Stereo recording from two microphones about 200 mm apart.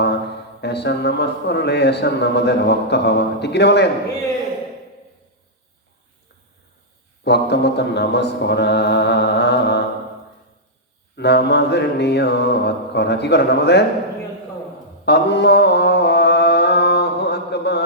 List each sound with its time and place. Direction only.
0.6 s speech: 55° left (ahead or behind)
7.3 s speech: 55° left (ahead or behind)
11.2 s speech: 55° left (ahead or behind)
15.0 s mantra: 60° left (ahead or behind)